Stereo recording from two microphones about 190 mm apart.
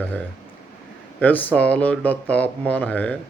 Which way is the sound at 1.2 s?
10° left (ahead or behind).